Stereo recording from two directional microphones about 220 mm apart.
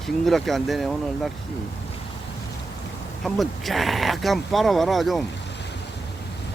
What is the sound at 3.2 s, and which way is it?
Speech, centre (ahead or behind).